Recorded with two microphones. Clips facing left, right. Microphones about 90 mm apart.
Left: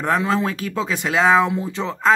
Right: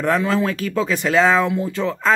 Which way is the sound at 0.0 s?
25° left (ahead or behind).